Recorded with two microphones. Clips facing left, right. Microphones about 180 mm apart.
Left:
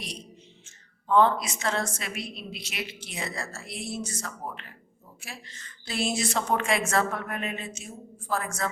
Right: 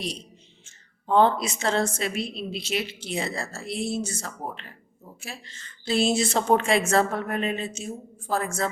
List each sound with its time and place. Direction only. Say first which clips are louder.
0.6 s a woman's voice: right 4 dB; 30° right (ahead or behind)